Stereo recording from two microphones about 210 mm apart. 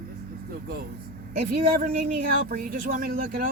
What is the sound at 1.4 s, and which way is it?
Speech, 40° right (ahead or behind).